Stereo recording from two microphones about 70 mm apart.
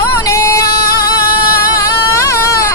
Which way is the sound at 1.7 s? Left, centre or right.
Left.